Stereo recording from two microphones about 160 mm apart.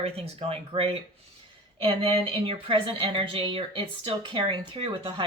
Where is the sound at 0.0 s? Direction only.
40° right (ahead or behind).